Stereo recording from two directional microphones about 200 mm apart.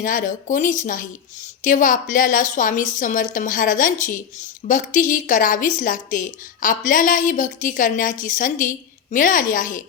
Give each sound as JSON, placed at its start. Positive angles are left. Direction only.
{"t": 0.0, "sound": "a woman's voice", "side_deg": 40}